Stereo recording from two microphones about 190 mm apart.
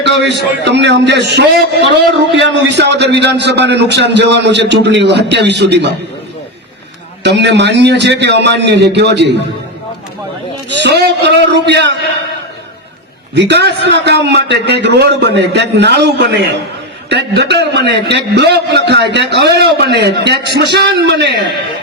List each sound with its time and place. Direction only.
0.0 s a man's voice: 65° right (ahead or behind)
7.2 s a man's voice: 65° right (ahead or behind)
10.8 s a man's voice: 60° right (ahead or behind)
13.3 s a man's voice: 65° right (ahead or behind)